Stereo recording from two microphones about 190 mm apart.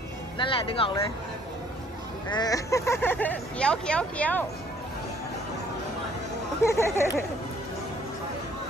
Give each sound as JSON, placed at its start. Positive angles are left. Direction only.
{"t": 0.4, "sound": "speech", "side_deg": 30}
{"t": 2.3, "sound": "speech", "side_deg": 20}
{"t": 6.6, "sound": "speech", "side_deg": 15}